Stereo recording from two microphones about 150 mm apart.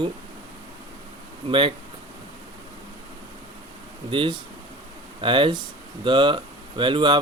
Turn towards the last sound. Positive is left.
turn(degrees=-35)  # may be behind; listen again after turning